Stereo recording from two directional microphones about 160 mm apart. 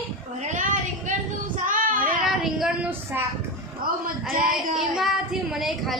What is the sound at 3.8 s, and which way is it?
Speech, 60° right (ahead or behind).